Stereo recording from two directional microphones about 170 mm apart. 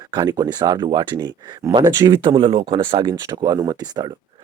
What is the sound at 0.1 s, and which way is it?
Speech, 25° right (ahead or behind).